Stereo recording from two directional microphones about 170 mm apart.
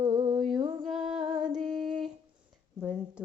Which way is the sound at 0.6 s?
25° right (ahead or behind).